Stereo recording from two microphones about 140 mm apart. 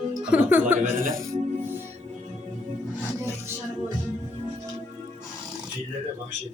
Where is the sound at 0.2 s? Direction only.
10° right (ahead or behind).